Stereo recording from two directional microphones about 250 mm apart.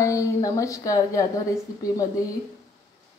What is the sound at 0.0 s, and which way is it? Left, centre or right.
A woman's voice, centre.